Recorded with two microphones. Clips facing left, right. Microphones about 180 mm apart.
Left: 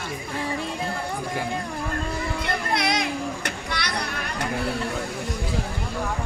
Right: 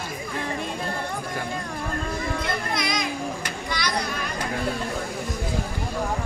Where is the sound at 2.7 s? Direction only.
65° left (ahead or behind).